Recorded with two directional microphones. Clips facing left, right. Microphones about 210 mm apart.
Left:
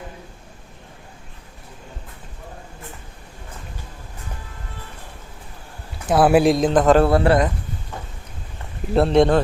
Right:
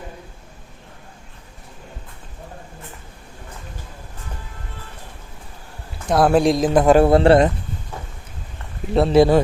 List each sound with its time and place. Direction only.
6.1 s speech: 5° left (ahead or behind); by 7.1 s 10° right (ahead or behind)
7.1 s speech: 25° right (ahead or behind)
8.9 s speech: centre (ahead or behind)